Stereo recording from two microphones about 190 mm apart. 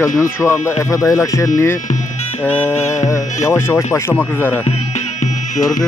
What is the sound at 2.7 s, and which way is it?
Music, 35° left (ahead or behind).